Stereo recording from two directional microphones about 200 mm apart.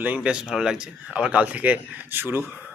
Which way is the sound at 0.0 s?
5° right (ahead or behind).